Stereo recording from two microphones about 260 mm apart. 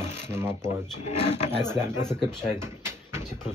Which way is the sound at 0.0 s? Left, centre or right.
Left.